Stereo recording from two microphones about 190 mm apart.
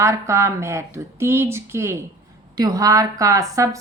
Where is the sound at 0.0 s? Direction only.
15° right (ahead or behind).